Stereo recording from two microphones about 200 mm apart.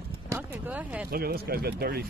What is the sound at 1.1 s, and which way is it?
Speech, 50° right (ahead or behind).